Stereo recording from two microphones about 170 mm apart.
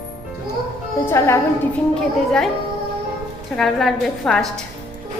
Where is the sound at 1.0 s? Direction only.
15° left (ahead or behind).